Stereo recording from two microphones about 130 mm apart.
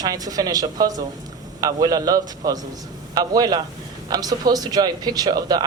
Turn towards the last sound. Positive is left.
turn(degrees=-30)  # may be behind; listen again after turning